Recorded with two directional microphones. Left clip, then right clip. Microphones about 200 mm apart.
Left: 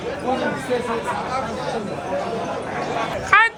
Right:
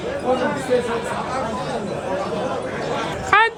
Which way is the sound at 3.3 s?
20° right (ahead or behind).